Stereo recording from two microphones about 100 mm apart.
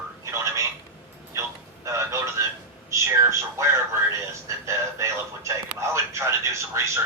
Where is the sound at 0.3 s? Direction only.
30° right (ahead or behind).